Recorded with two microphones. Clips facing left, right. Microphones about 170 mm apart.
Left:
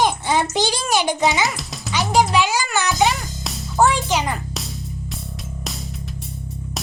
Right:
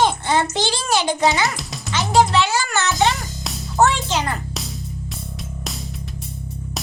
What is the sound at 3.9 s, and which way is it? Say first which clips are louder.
Speech: left 2 dB; 15° left (ahead or behind).